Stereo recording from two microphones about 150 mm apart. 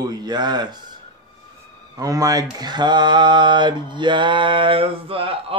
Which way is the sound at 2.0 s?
25° right (ahead or behind).